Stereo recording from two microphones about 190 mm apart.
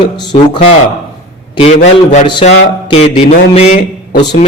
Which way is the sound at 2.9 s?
30° left (ahead or behind).